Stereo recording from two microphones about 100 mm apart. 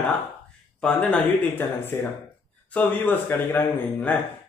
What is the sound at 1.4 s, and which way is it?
A man's voice, 20° left (ahead or behind).